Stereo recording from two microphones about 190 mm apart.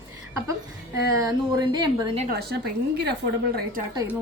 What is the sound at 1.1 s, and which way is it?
Speech, 20° right (ahead or behind).